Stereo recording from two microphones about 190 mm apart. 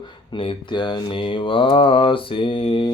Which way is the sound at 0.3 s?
25° left (ahead or behind).